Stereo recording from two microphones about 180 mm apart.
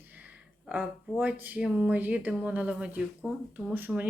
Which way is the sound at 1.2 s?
10° right (ahead or behind).